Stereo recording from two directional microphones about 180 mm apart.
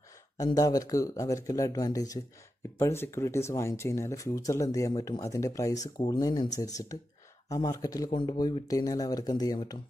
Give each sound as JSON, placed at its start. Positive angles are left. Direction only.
{"t": 0.4, "sound": "speech", "side_deg": 20}